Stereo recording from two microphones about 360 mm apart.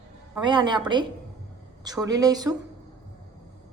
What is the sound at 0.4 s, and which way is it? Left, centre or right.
Speech, centre.